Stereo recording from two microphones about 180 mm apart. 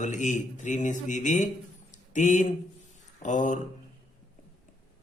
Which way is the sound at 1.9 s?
40° left (ahead or behind).